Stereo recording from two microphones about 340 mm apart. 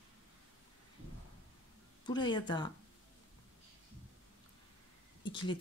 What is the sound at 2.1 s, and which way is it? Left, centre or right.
Speech, centre.